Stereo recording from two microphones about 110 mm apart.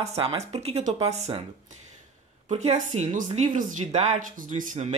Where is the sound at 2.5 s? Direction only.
90° right.